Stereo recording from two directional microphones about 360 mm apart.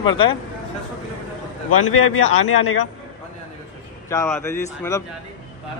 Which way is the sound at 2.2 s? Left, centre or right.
Centre.